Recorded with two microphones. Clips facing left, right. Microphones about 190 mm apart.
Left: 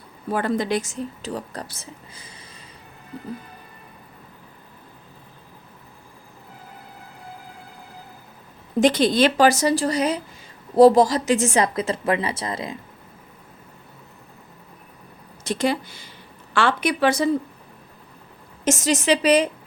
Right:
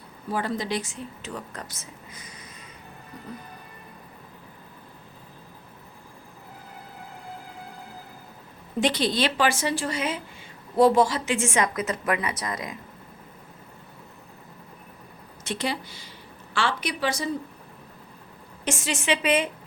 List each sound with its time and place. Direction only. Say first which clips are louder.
0.3 s a woman's voice: left 5 dB; 55° left (ahead or behind); by 2.3 s 30° left (ahead or behind)
8.8 s a woman's voice: left 7 dB; 50° left (ahead or behind); by 12.8 s 25° left (ahead or behind)
15.4 s speech: left 7 dB; 45° left (ahead or behind)
18.6 s a woman's voice: left 8 dB; 40° left (ahead or behind)